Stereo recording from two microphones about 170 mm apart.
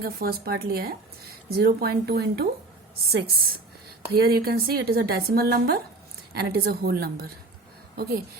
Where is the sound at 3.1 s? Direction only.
65° right (ahead or behind).